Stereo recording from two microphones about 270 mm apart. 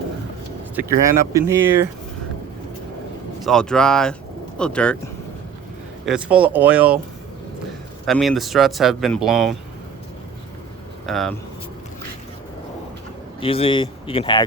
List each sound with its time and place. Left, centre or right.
0.8 s speech: centre
3.4 s speech: centre
6.1 s speech: centre
8.0 s speech: centre
11.0 s speech: centre
13.4 s speech: centre